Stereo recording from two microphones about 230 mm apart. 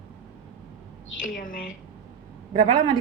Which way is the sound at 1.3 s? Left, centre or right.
Left.